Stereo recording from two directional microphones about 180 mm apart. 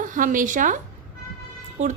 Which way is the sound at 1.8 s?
40° right (ahead or behind).